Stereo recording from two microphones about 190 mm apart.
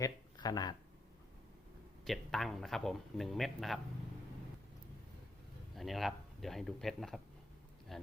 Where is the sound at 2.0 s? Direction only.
Centre (ahead or behind).